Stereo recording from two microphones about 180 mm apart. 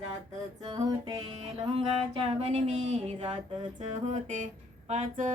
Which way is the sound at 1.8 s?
30° right (ahead or behind).